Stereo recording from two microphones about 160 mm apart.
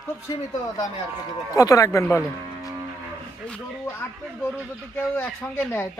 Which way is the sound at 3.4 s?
10° left (ahead or behind).